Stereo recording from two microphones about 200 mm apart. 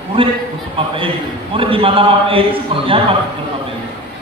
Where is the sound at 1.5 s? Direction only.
25° right (ahead or behind).